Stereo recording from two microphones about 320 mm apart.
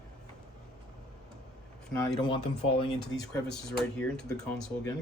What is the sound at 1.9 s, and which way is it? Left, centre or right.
Speech, centre.